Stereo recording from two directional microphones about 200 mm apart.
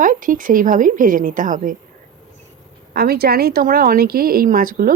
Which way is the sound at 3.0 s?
50° right (ahead or behind).